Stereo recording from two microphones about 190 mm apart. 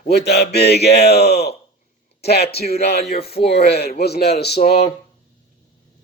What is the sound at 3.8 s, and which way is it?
Speech, 55° left (ahead or behind).